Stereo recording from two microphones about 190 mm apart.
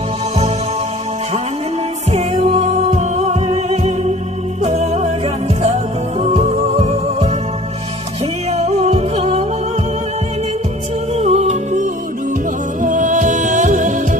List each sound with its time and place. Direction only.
2.0 s music: 35° right (ahead or behind)
8.5 s music: 35° right (ahead or behind)
11.1 s music: 35° right (ahead or behind)